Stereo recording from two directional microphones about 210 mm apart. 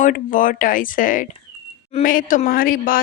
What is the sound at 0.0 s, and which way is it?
Speech, 40° left (ahead or behind).